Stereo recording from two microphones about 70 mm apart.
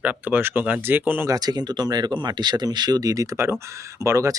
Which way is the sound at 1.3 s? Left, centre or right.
Right.